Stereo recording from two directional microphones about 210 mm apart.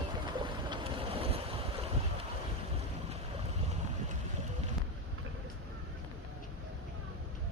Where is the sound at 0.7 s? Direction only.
25° right (ahead or behind).